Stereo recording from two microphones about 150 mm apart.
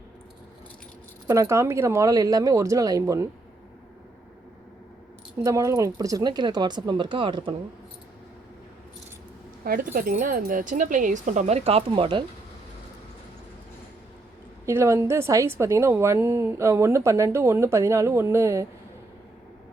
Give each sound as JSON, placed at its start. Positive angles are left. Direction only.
{"t": 1.3, "sound": "a woman's voice", "side_deg": -20}
{"t": 5.4, "sound": "a woman's voice", "side_deg": -20}
{"t": 9.6, "sound": "speech", "side_deg": -75}
{"t": 14.7, "sound": "a woman's voice", "side_deg": -20}